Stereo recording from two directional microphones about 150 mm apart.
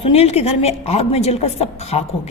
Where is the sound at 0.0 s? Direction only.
45° left (ahead or behind).